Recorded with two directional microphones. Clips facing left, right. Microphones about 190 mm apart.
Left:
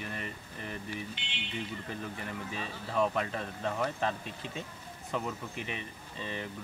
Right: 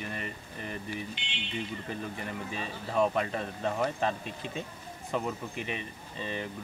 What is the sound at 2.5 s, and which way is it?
Speech, 20° right (ahead or behind).